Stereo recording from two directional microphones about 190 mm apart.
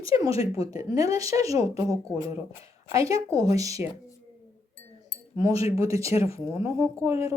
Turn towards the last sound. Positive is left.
turn(degrees=-15)  # may be behind; listen again after turning